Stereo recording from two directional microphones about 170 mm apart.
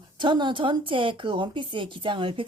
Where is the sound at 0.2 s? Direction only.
25° right (ahead or behind).